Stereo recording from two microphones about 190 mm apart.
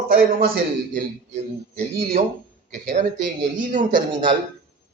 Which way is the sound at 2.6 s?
40° right (ahead or behind).